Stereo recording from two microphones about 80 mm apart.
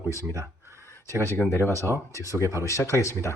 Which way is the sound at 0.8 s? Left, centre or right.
Left.